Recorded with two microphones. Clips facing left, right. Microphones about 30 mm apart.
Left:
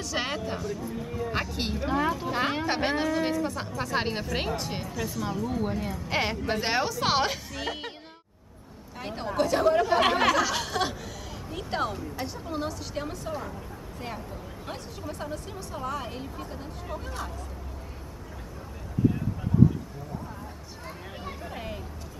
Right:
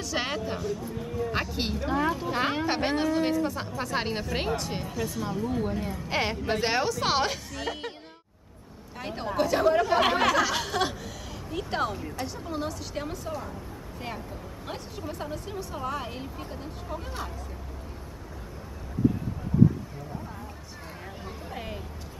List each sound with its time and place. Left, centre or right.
0.0 s speech: centre
9.0 s speech: centre
14.7 s speech: centre
21.5 s vehicle: centre